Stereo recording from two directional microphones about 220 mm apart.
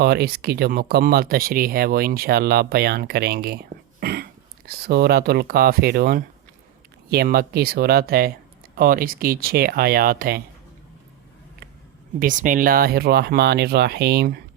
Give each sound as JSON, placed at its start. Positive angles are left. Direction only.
{"t": 0.0, "sound": "speech", "side_deg": -45}
{"t": 12.2, "sound": "speech", "side_deg": -35}